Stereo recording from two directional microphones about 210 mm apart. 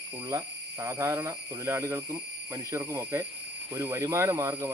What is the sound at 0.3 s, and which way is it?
Speech, 15° right (ahead or behind).